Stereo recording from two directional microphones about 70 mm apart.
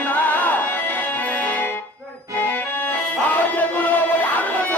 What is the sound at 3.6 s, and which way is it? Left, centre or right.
Music, left.